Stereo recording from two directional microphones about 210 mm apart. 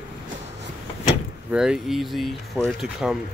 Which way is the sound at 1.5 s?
5° right (ahead or behind).